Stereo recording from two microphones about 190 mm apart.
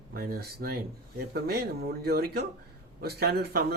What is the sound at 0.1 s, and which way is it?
A man's voice, 50° right (ahead or behind).